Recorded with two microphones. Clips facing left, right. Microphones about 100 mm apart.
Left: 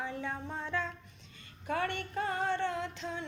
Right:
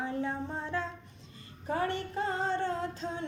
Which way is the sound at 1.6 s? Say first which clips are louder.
Right 2 dB; 35° right (ahead or behind).